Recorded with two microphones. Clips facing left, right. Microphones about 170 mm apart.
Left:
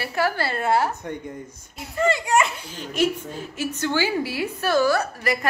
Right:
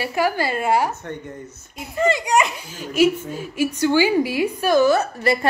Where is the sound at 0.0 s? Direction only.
15° right (ahead or behind).